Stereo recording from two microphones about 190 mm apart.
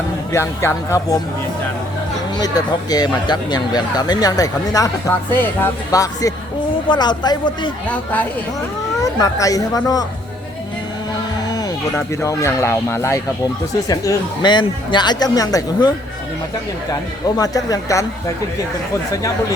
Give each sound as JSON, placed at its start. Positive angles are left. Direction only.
{"t": 0.3, "sound": "speech", "side_deg": 15}
{"t": 2.4, "sound": "speech", "side_deg": 20}
{"t": 7.9, "sound": "speech", "side_deg": 10}
{"t": 11.4, "sound": "speech", "side_deg": 15}
{"t": 16.9, "sound": "speech", "side_deg": 20}